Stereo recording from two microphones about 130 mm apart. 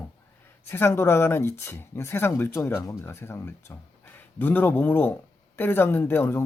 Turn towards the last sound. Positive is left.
turn(degrees=15)  # may be behind; listen again after turning